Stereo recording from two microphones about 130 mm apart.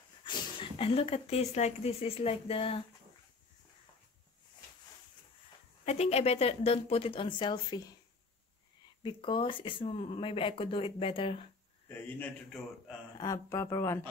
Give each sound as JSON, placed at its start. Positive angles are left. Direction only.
{"t": 0.2, "sound": "speech", "side_deg": 40}
{"t": 5.9, "sound": "speech", "side_deg": 55}
{"t": 9.0, "sound": "speech", "side_deg": 40}
{"t": 13.2, "sound": "speech", "side_deg": 25}